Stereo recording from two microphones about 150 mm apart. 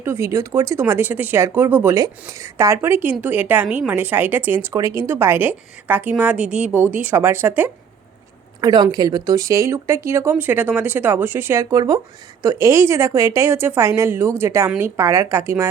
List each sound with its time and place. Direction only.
0.0 s speech: 15° right (ahead or behind)
8.6 s speech: 25° right (ahead or behind)